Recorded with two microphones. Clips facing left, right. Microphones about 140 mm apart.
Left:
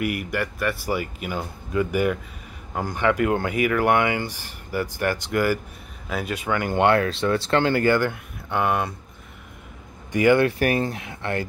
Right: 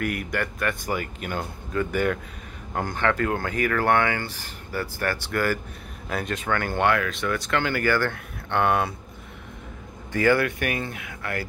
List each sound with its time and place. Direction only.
0.0 s speech: 5° left (ahead or behind)
6.9 s speech: 30° left (ahead or behind)
8.1 s speech: 5° left (ahead or behind)
10.1 s speech: 20° left (ahead or behind)
10.6 s speech: 35° left (ahead or behind)